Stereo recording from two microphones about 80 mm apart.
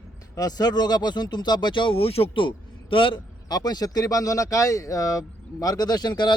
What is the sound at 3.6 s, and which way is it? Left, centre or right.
Speech, left.